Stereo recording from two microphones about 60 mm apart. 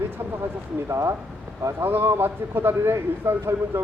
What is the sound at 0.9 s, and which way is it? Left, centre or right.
Speech, right.